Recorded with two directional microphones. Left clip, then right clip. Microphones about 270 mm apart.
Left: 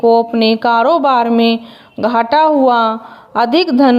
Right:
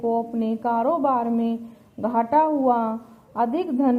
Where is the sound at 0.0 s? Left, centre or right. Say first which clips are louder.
Left 14 dB; left.